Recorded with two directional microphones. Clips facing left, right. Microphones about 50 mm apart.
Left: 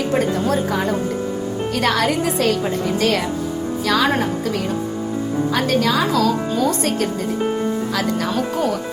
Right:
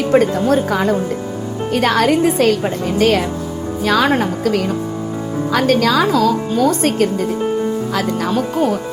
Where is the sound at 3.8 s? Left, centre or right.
Right.